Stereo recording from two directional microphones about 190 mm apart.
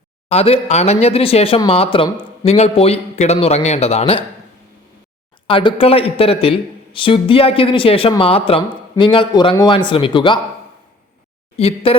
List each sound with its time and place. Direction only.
0.3 s speech: 30° left (ahead or behind)
5.5 s speech: 30° left (ahead or behind)
11.5 s speech: 30° left (ahead or behind)